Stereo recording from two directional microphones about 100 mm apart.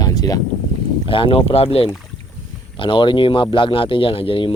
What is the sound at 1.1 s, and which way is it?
Speech, 60° left (ahead or behind).